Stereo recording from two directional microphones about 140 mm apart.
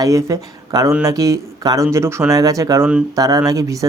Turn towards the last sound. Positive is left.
turn(degrees=-25)  # may be behind; listen again after turning